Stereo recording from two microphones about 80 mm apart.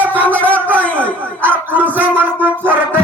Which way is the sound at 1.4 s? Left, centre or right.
Right.